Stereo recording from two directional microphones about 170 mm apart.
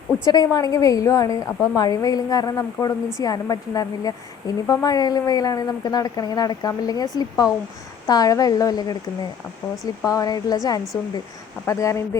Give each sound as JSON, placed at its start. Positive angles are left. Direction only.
{"t": 0.3, "sound": "a woman's voice", "side_deg": 20}